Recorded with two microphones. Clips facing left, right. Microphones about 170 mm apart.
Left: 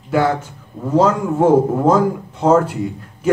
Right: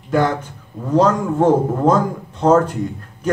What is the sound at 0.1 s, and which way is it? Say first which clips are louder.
A man's voice: left 1 dB; 10° left (ahead or behind).